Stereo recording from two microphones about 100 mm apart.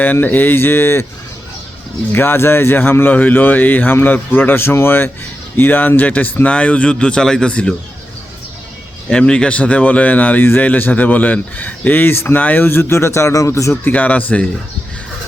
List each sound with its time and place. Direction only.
0.0 s speech: 20° left (ahead or behind)
2.1 s speech: 20° left (ahead or behind)
9.0 s speech: 10° left (ahead or behind); by 13.9 s 30° left (ahead or behind)
13.9 s speech: 15° left (ahead or behind)